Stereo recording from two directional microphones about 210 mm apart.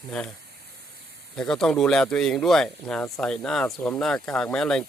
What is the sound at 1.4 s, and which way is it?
Speech, 5° left (ahead or behind).